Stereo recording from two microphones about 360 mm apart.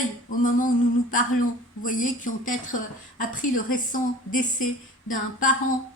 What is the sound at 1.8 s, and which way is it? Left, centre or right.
Speech, left.